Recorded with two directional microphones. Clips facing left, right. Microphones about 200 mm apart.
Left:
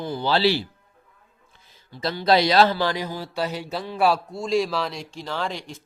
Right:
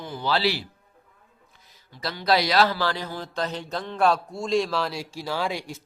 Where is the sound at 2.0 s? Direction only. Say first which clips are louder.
Left 4 dB; 25° left (ahead or behind).